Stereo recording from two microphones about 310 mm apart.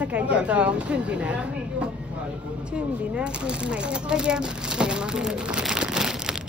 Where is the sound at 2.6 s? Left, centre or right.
Centre.